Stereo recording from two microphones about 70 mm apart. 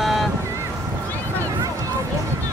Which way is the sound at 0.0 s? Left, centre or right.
Centre.